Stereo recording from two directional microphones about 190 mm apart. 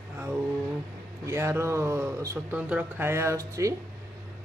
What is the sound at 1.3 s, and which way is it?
A man's voice, 15° right (ahead or behind).